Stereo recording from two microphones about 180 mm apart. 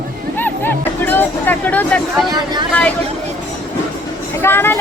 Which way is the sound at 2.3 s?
25° right (ahead or behind).